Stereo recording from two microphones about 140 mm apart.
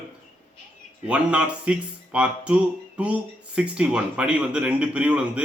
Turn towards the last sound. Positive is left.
turn(degrees=-10)  # may be behind; listen again after turning